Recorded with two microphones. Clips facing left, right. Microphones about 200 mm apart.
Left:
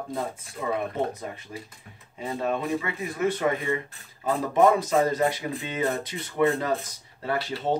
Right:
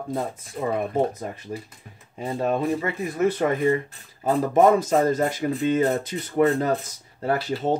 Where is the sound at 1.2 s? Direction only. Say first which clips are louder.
Right 4 dB; 45° right (ahead or behind).